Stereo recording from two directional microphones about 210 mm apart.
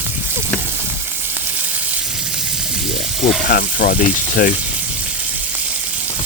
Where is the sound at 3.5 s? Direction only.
45° left (ahead or behind).